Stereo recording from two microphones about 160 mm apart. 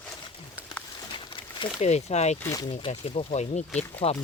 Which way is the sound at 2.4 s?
20° left (ahead or behind).